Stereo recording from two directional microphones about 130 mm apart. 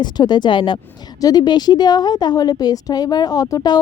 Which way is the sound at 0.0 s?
35° left (ahead or behind).